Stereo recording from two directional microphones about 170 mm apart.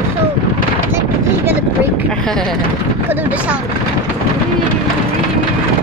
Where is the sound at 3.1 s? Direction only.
10° right (ahead or behind).